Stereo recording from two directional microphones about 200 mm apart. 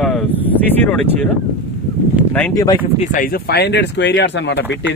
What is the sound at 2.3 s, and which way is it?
Speech, 15° left (ahead or behind).